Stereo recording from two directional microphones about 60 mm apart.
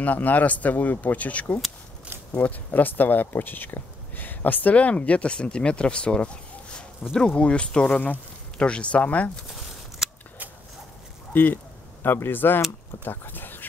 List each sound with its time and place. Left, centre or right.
0.0 s speech: left
7.0 s speech: centre
7.3 s speech: centre
10.0 s scissors: centre
11.3 s speech: left